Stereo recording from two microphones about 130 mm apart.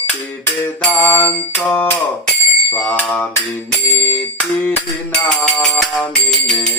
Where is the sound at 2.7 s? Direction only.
10° left (ahead or behind).